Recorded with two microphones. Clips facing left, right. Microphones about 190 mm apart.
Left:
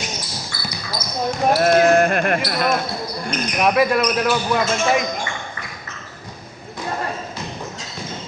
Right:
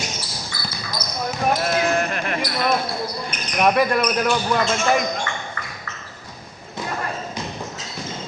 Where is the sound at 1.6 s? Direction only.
50° left (ahead or behind).